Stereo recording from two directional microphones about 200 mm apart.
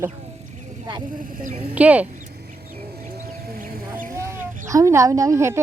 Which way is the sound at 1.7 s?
5° right (ahead or behind).